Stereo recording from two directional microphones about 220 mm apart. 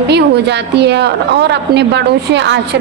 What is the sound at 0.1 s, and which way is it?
A woman's voice, 50° right (ahead or behind).